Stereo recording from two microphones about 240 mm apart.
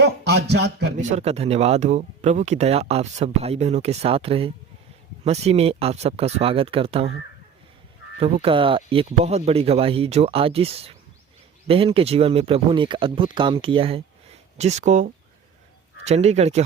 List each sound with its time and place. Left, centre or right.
0.0 s speech: right
0.9 s speech: right
8.2 s speech: right